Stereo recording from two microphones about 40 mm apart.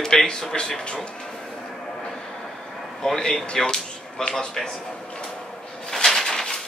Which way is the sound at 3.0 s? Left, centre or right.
Centre.